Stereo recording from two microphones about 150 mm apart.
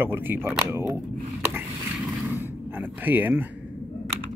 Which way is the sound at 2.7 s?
10° right (ahead or behind).